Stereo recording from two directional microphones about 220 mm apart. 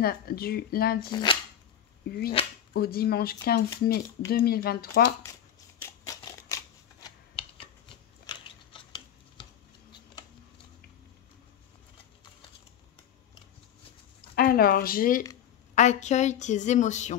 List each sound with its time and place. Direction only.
0.0 s speech: 45° left (ahead or behind)
1.0 s speech: 20° left (ahead or behind)
2.0 s speech: 45° left (ahead or behind)
5.8 s shuffling cards: 15° left (ahead or behind)
8.3 s a sound: 20° left (ahead or behind)
14.3 s a woman's voice: 40° left (ahead or behind)